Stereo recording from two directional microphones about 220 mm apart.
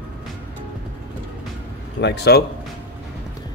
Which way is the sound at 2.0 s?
50° left (ahead or behind).